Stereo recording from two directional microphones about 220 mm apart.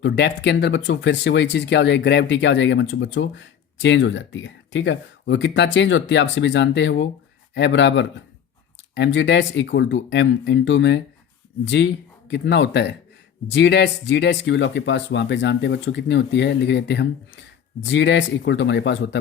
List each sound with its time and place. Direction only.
0.0 s speech: 50° left (ahead or behind)